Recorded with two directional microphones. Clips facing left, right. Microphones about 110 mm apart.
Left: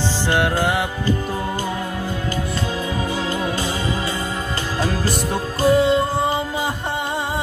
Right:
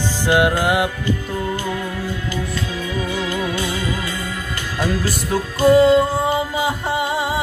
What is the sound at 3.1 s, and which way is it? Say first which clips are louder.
Music: even; 35° left (ahead or behind).